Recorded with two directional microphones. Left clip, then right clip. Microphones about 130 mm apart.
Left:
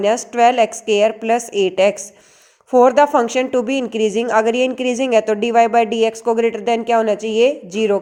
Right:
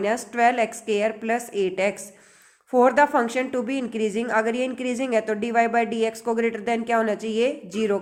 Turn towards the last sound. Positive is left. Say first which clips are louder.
# left 7 dB
turn(degrees=35)  # may be behind; listen again after turning